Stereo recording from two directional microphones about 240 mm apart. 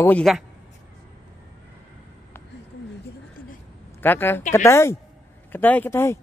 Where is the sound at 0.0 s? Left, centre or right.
Centre.